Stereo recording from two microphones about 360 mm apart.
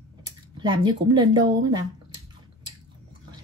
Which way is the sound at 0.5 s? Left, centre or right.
Centre.